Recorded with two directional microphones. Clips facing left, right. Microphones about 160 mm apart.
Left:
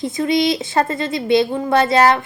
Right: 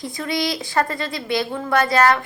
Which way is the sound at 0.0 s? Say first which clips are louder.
Left 7 dB; 20° left (ahead or behind).